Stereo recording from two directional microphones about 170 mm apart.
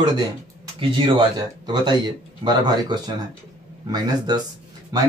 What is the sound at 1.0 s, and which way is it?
Speech, 30° right (ahead or behind).